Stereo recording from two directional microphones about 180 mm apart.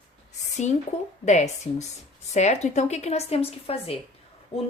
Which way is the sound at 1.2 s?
40° left (ahead or behind).